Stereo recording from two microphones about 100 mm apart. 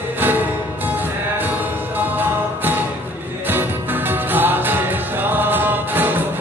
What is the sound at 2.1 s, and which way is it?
Music, 20° right (ahead or behind).